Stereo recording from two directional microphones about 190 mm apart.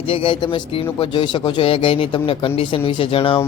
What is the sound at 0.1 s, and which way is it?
Speech, 25° left (ahead or behind).